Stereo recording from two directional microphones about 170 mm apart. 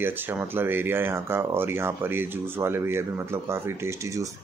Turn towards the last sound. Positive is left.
turn(degrees=-20)  # may be behind; listen again after turning